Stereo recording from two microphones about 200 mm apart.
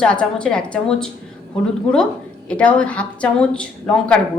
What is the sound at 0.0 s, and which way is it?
A woman's voice, 5° left (ahead or behind).